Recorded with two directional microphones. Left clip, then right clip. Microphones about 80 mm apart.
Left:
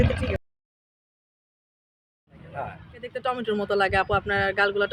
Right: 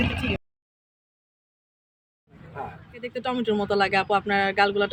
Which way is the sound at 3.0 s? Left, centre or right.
Left.